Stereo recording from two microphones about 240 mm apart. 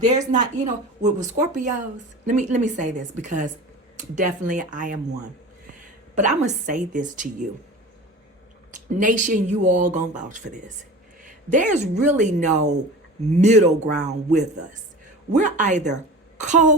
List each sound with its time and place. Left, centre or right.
0.0 s speech: right
6.1 s speech: right
8.7 s speech: right